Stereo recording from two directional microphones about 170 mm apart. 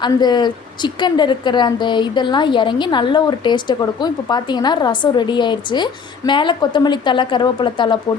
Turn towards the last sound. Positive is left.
turn(degrees=25)  # may be behind; listen again after turning